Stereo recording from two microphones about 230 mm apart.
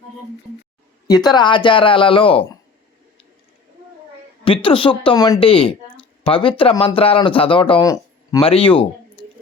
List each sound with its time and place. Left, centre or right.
1.0 s speech: centre
4.4 s speech: left